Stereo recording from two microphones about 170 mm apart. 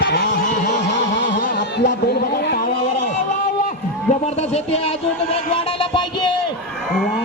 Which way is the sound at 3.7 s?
40° left (ahead or behind).